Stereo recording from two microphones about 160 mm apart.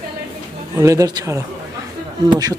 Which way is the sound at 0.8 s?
20° right (ahead or behind).